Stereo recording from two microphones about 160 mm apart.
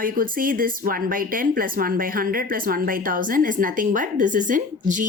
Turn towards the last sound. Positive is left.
turn(degrees=-55)  # may be behind; listen again after turning